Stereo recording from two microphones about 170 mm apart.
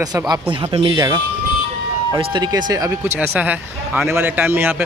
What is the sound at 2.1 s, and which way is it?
Speech, 25° right (ahead or behind).